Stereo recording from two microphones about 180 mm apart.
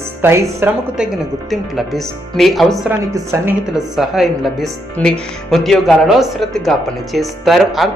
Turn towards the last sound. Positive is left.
turn(degrees=0)  # may be behind; listen again after turning